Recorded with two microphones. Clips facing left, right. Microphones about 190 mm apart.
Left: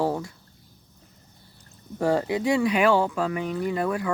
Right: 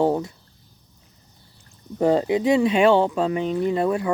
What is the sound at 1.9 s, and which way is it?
Speech, 20° right (ahead or behind).